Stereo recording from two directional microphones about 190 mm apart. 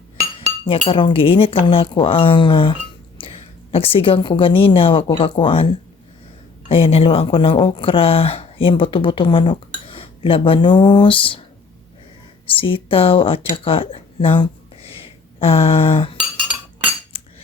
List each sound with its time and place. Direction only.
0.3 s a woman's voice: 30° left (ahead or behind)
6.7 s speech: 30° left (ahead or behind)
12.5 s speech: 25° left (ahead or behind)